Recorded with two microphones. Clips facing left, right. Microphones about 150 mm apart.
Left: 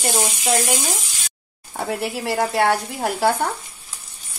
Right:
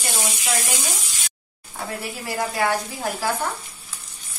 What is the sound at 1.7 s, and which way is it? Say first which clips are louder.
Speech: left 6 dB; 65° left (ahead or behind).